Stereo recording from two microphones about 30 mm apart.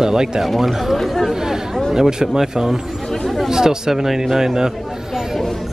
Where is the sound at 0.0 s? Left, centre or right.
Right.